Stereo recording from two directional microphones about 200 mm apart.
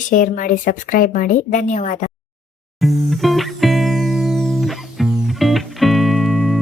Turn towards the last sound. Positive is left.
turn(degrees=0)  # may be behind; listen again after turning